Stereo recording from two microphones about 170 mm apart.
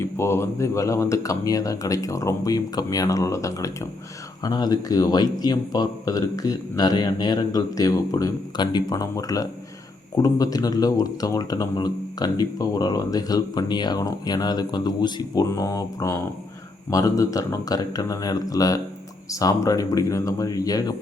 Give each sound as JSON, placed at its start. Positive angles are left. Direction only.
{"t": 0.0, "sound": "speech", "side_deg": 15}